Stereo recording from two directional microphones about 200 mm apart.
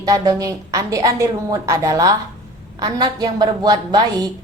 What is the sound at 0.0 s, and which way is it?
A woman's voice, 20° right (ahead or behind).